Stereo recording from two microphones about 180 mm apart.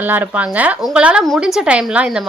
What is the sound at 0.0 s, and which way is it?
Speech, 10° right (ahead or behind).